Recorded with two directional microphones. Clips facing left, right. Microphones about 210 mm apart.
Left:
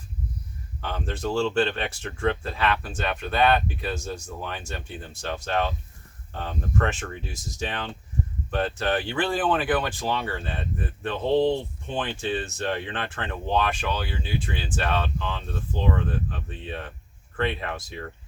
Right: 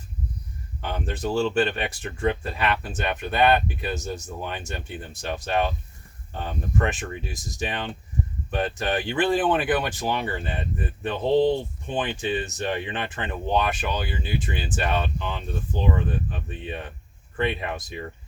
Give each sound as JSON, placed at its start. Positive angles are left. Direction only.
{"t": 0.8, "sound": "speech", "side_deg": -15}